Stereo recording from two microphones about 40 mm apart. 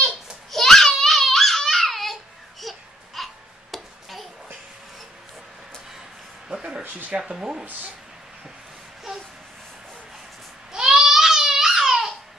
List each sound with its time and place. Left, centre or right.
0.5 s babbling: centre
2.6 s baby cry: centre
3.2 s a sound: centre
6.8 s speech: right
7.2 s speech: centre
10.7 s babbling: centre